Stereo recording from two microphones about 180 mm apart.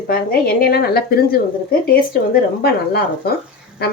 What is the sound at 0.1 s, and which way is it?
Speech, 55° left (ahead or behind).